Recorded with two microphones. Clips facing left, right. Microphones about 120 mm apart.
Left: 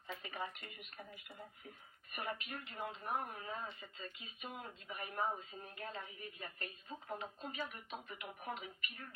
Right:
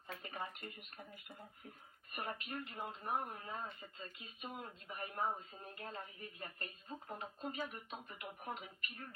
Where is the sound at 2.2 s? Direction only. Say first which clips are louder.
Even; 40° right (ahead or behind).